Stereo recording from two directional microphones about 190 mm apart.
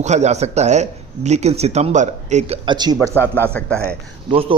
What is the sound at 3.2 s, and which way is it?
Speech, 10° left (ahead or behind).